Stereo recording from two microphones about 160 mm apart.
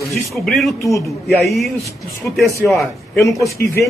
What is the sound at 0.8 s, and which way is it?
Speech, 20° left (ahead or behind).